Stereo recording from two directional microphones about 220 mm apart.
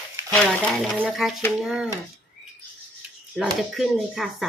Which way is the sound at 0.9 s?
5° right (ahead or behind).